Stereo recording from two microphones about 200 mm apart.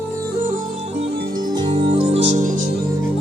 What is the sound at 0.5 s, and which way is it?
Music, 40° right (ahead or behind).